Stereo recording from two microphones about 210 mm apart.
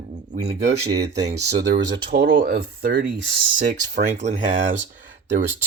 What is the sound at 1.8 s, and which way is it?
Speech, 50° right (ahead or behind).